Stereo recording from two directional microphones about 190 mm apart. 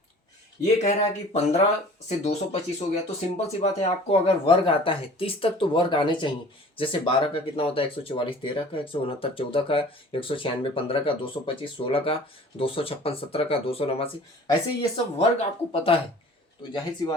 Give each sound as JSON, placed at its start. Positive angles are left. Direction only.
{"t": 0.6, "sound": "speech", "side_deg": 35}